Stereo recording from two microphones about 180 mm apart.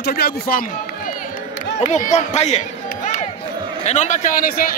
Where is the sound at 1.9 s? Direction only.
40° left (ahead or behind).